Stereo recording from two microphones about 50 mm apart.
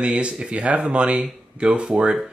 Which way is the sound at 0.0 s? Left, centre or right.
Right.